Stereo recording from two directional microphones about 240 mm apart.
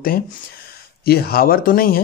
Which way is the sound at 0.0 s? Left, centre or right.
Left.